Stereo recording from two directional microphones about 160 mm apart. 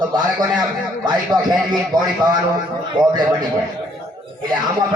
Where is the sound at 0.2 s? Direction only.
25° right (ahead or behind).